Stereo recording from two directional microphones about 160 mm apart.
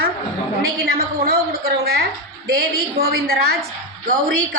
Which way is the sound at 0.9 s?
65° right (ahead or behind).